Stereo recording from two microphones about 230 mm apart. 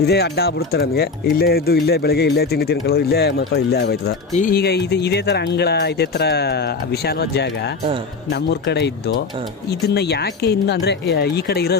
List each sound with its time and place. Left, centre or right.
0.0 s speech: left